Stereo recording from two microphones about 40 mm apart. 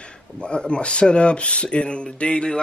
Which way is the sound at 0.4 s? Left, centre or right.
Left.